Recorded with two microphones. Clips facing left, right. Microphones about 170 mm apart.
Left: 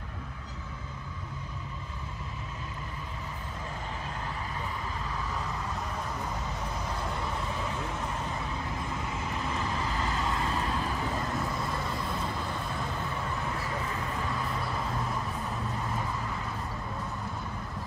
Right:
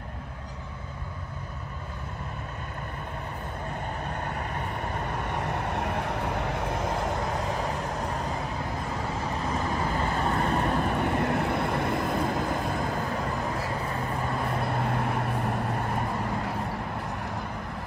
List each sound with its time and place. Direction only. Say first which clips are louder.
4.2 s vehicle: right 4 dB; 65° right (ahead or behind)
7.2 s vehicle: right 5 dB; 40° right (ahead or behind)
10.4 s vehicle: right 6 dB; 65° right (ahead or behind)
14.6 s vehicle: right 5 dB; 60° right (ahead or behind)